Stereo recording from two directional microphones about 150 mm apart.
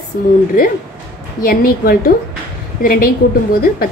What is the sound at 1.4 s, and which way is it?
A woman's voice, 75° left (ahead or behind).